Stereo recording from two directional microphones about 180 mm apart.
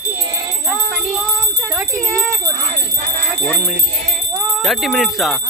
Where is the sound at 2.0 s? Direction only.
Centre (ahead or behind).